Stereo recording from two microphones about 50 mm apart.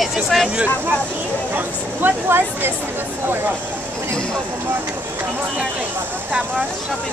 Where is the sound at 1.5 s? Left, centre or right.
Right.